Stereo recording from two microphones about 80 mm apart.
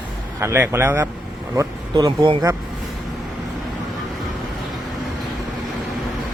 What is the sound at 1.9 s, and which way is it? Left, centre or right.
Speech, right.